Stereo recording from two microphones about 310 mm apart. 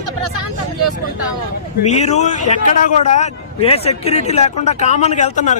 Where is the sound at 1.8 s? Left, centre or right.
Left.